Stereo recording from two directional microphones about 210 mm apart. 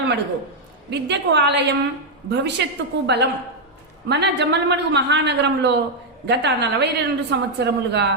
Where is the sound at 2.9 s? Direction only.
55° right (ahead or behind).